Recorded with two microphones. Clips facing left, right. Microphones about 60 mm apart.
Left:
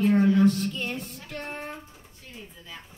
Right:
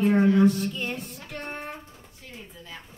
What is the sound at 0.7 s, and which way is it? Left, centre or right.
Speech, centre.